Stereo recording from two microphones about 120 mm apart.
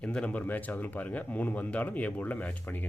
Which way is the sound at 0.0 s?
10° left (ahead or behind).